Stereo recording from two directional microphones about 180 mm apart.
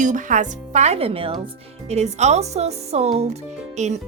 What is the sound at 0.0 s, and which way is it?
Speech, 45° right (ahead or behind).